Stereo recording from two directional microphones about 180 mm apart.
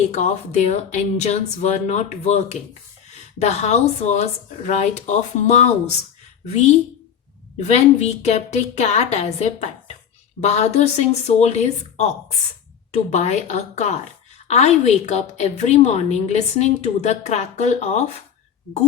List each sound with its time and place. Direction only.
0.1 s a woman's voice: 40° left (ahead or behind)